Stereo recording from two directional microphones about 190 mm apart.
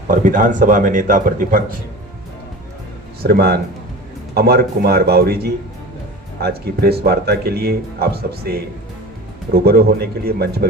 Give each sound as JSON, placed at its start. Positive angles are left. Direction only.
{"t": 0.1, "sound": "a man's voice", "side_deg": -45}
{"t": 3.2, "sound": "speech", "side_deg": -55}